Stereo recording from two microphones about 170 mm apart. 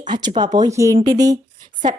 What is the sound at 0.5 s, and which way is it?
Speech, 20° right (ahead or behind).